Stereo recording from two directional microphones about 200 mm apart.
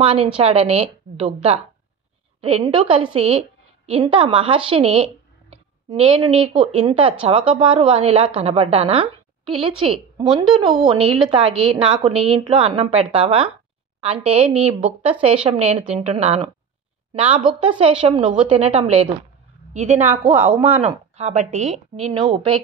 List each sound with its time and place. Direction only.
0.0 s speech: 25° right (ahead or behind)
2.6 s a woman's voice: 25° right (ahead or behind)
10.7 s a woman's voice: centre (ahead or behind)
11.2 s speech: 25° right (ahead or behind)
17.6 s speech: 25° right (ahead or behind)
20.1 s a man's voice: 10° right (ahead or behind)
21.2 s speech: 35° right (ahead or behind)